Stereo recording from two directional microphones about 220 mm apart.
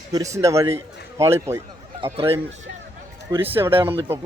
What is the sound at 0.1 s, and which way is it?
Speech, 15° right (ahead or behind).